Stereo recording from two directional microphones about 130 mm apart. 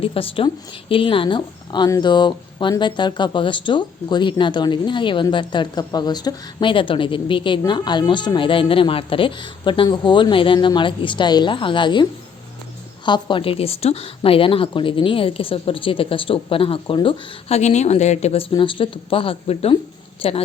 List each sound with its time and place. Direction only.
0.0 s a woman's voice: 45° left (ahead or behind)
13.1 s a woman's voice: 35° left (ahead or behind)
17.6 s speech: 60° left (ahead or behind)
18.5 s a woman's voice: 40° left (ahead or behind)